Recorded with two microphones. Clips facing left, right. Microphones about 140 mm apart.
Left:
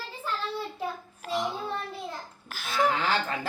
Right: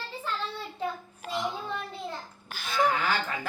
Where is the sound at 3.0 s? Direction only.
30° left (ahead or behind).